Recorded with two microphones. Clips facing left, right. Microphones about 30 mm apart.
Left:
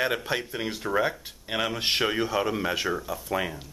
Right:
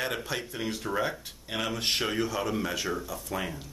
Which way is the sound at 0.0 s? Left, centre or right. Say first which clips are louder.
Left 5 dB; centre.